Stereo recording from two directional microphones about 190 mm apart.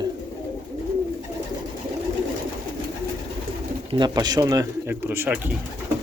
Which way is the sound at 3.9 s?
20° right (ahead or behind).